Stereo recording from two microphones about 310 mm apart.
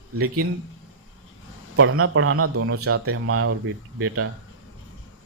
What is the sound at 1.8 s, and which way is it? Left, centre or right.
Speech, right.